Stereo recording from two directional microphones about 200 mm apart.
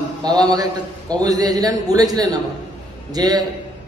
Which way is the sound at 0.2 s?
20° right (ahead or behind).